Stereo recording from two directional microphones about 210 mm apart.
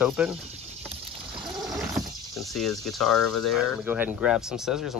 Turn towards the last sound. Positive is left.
turn(degrees=0)  # may be behind; listen again after turning